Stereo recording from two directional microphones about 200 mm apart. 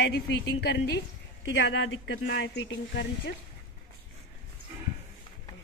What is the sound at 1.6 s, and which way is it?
Speech, 65° left (ahead or behind).